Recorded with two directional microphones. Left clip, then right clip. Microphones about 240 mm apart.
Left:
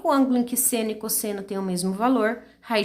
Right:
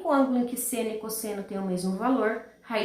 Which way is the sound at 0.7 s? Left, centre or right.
Left.